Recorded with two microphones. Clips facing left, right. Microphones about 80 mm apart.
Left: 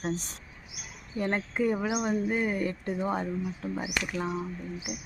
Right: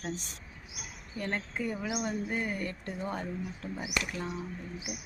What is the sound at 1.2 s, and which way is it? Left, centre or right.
Speech, left.